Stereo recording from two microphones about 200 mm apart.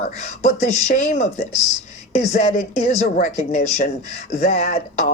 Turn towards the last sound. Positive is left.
turn(degrees=35)  # may be behind; listen again after turning